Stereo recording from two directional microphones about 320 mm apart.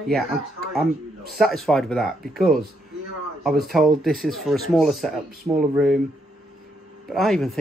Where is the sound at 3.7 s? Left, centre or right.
Centre.